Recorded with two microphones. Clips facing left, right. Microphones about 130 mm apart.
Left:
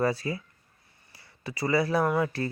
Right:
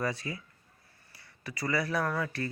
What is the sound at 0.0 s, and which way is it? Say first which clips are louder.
Speech: left 7 dB; 35° left (ahead or behind).